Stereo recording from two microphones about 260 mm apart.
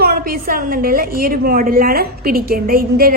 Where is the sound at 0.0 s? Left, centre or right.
Right.